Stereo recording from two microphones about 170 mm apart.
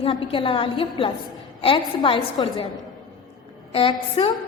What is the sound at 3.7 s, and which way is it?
Speech, 30° left (ahead or behind).